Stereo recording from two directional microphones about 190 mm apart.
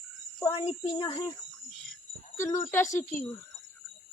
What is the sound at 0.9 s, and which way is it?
Speech, 25° left (ahead or behind).